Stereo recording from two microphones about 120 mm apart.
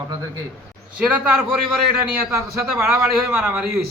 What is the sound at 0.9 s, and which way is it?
Speech, 10° right (ahead or behind).